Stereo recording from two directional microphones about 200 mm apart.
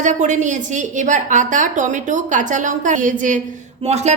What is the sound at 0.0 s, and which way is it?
A woman's voice, 35° right (ahead or behind).